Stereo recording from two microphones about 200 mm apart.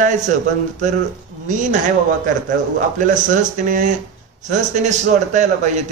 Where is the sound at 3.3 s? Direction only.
40° right (ahead or behind).